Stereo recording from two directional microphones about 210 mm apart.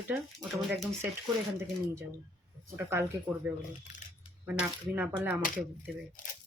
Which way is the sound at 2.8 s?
15° right (ahead or behind).